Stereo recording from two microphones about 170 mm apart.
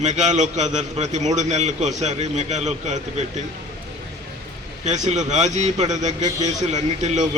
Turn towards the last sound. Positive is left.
turn(degrees=-45)  # may be behind; listen again after turning